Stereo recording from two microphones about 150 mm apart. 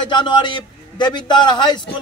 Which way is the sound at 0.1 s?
30° left (ahead or behind).